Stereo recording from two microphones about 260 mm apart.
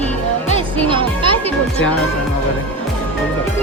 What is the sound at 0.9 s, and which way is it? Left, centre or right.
Speech, centre.